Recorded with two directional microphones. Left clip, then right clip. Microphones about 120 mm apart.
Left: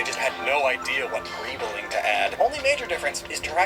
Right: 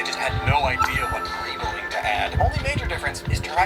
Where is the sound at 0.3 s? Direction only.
30° left (ahead or behind).